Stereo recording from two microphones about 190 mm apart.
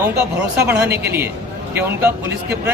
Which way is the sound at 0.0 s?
5° right (ahead or behind).